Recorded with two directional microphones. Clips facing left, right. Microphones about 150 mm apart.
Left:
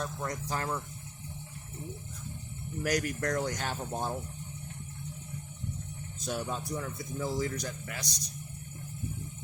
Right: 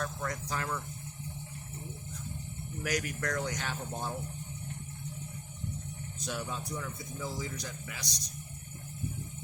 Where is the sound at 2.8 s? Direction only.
40° left (ahead or behind).